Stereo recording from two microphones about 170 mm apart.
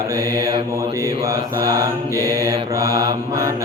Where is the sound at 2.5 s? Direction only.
20° right (ahead or behind).